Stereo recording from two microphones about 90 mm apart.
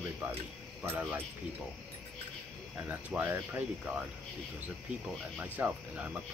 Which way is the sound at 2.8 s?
15° right (ahead or behind).